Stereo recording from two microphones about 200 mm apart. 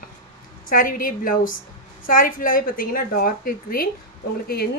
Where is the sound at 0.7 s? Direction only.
45° left (ahead or behind).